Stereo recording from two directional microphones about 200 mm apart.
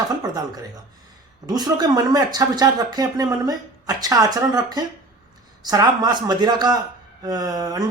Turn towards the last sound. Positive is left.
turn(degrees=-20)  # may be behind; listen again after turning